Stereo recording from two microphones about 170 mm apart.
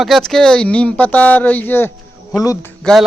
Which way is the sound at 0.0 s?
Centre (ahead or behind).